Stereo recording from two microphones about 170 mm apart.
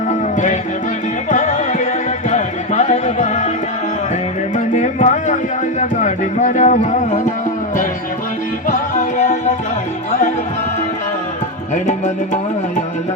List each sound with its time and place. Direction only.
0.1 s music: 45° left (ahead or behind)
4.5 s music: 45° left (ahead or behind)
8.6 s music: 45° left (ahead or behind)
11.7 s tabla: 50° left (ahead or behind)